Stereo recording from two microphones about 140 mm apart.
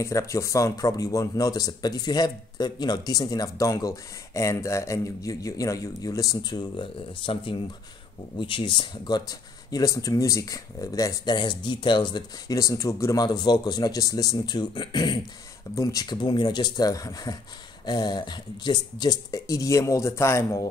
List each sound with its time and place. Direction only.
0.0 s speech: 20° left (ahead or behind)